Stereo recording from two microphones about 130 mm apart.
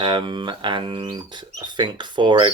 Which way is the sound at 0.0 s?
35° right (ahead or behind).